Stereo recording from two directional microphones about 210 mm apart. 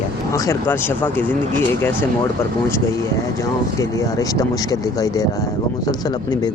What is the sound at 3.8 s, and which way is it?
Speech, 15° left (ahead or behind).